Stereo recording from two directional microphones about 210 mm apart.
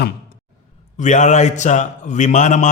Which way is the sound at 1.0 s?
35° left (ahead or behind).